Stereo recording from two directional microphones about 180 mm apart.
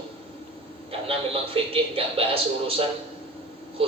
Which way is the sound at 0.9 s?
30° right (ahead or behind).